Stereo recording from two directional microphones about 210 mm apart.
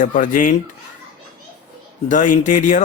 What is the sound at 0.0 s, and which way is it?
Speech, 40° left (ahead or behind).